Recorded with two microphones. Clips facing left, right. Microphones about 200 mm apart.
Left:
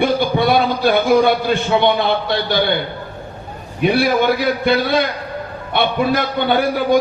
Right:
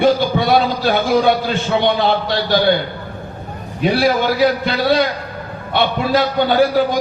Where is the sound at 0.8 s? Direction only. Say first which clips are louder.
Left 1 dB; 50° left (ahead or behind).